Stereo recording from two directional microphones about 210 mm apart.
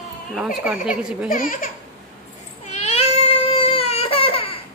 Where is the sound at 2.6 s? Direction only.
30° left (ahead or behind).